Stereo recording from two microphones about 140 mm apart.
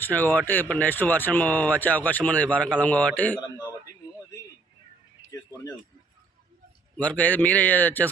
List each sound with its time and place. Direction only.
0.0 s speech: 15° left (ahead or behind)
5.3 s speech: 20° left (ahead or behind)
6.9 s speech: 10° left (ahead or behind)